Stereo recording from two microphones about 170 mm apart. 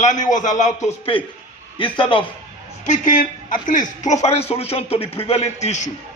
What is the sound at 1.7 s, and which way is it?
Speech, 30° left (ahead or behind).